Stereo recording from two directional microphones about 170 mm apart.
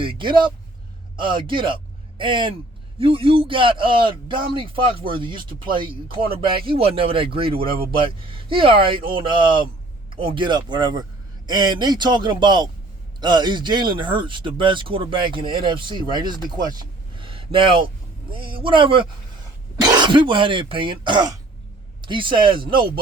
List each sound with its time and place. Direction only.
0.0 s a man's voice: 30° right (ahead or behind)